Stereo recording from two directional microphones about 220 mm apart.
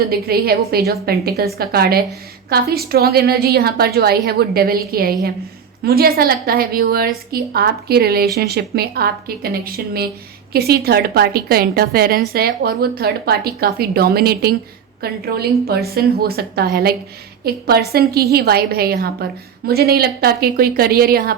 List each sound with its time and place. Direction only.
0.1 s a woman's voice: 45° right (ahead or behind)